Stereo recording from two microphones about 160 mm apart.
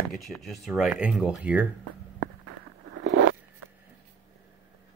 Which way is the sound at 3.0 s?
90° right.